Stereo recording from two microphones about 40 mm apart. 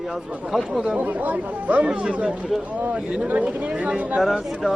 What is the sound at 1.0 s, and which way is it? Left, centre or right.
Speech, right.